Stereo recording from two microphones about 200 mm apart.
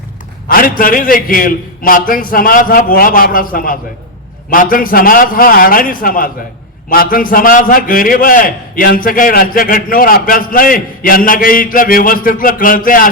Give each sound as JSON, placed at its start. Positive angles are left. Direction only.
{"t": 0.4, "sound": "a man's voice", "side_deg": 45}